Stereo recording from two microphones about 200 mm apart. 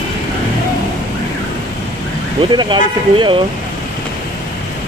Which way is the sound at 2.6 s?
25° right (ahead or behind).